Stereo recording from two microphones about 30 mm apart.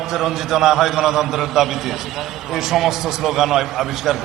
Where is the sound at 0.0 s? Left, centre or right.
Centre.